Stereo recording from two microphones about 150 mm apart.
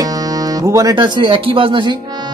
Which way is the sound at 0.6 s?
20° right (ahead or behind).